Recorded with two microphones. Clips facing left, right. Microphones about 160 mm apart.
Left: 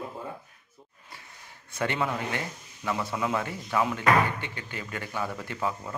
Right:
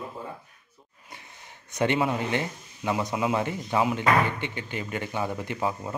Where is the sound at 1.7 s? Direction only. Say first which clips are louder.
Right 4 dB; 20° right (ahead or behind).